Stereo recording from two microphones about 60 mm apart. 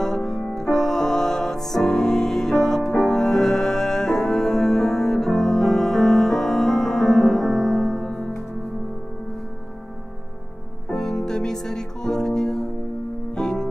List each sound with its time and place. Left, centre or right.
0.0 s music: centre
10.9 s music: centre